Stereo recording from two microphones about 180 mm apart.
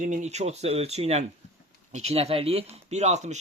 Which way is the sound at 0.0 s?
40° right (ahead or behind).